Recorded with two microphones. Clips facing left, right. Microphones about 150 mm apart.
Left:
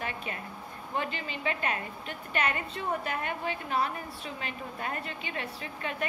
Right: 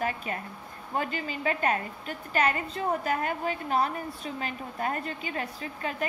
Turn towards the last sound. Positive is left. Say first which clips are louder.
# right 3 dB
turn(degrees=-35)  # may be behind; listen again after turning